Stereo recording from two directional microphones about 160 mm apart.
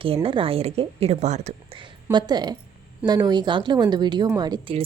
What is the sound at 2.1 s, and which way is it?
A woman's voice, 25° right (ahead or behind).